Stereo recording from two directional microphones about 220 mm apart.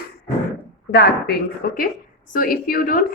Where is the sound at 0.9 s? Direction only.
45° left (ahead or behind).